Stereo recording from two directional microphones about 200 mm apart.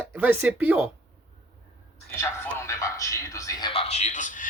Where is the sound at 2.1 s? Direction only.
10° left (ahead or behind); by 4.5 s 40° left (ahead or behind).